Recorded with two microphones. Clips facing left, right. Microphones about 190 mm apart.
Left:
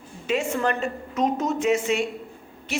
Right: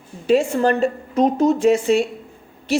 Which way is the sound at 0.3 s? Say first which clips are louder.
Right 8 dB; 35° right (ahead or behind).